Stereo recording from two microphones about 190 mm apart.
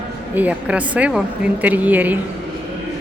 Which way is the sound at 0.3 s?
10° right (ahead or behind).